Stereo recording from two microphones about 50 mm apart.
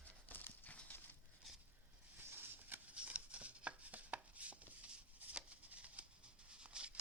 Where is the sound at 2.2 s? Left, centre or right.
Right.